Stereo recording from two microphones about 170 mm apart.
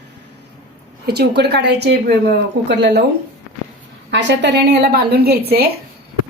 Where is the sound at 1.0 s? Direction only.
70° right (ahead or behind).